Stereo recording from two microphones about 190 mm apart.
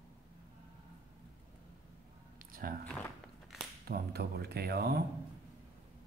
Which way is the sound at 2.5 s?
50° right (ahead or behind).